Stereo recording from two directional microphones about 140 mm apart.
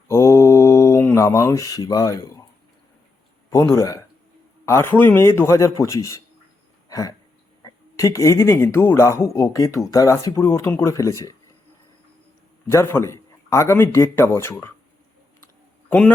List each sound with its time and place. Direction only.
0.1 s mantra: 20° left (ahead or behind)
3.5 s speech: 25° left (ahead or behind)
6.8 s a sound: 25° left (ahead or behind)
7.6 s speech: 25° left (ahead or behind)
12.7 s speech: 20° left (ahead or behind)
15.9 s a man's voice: 15° left (ahead or behind)